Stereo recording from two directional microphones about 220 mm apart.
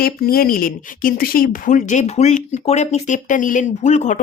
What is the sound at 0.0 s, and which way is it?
Speech, 40° left (ahead or behind).